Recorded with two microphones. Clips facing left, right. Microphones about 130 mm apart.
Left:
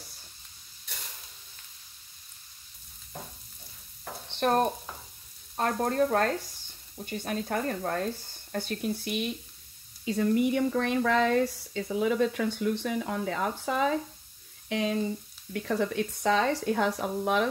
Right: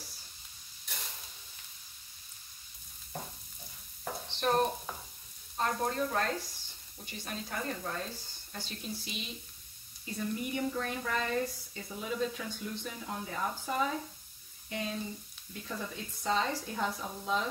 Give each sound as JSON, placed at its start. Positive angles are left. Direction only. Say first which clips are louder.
{"t": 4.4, "sound": "speech", "louder": "left 4 dB", "side_deg": 55}
{"t": 10.0, "sound": "speech", "louder": "left 11 dB", "side_deg": 90}